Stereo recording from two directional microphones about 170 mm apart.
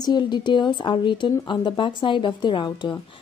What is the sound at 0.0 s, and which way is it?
A woman's voice, 25° left (ahead or behind).